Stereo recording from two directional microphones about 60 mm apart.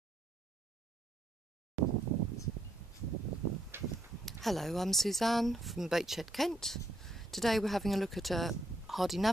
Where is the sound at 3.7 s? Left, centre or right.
Right.